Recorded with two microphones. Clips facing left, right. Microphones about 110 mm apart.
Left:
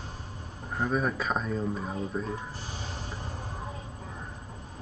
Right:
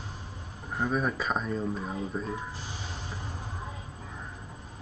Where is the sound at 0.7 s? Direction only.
Centre (ahead or behind).